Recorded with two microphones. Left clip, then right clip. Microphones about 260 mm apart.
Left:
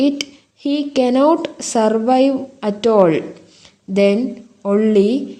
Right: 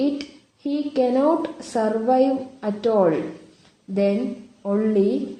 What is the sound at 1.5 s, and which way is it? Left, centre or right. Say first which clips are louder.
Speech: left 7 dB; left.